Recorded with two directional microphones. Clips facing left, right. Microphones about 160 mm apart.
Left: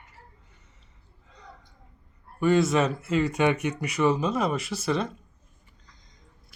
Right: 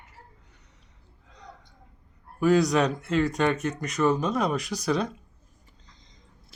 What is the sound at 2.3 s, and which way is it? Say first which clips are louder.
Speech: right 1 dB; centre (ahead or behind).